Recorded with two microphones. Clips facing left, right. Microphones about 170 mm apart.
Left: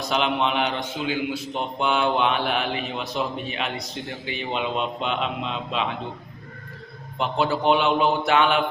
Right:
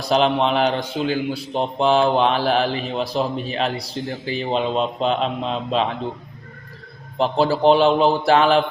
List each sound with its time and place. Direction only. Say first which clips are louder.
0.0 s a man's voice: right 5 dB; 35° right (ahead or behind)
7.2 s a man's voice: right 6 dB; 35° right (ahead or behind)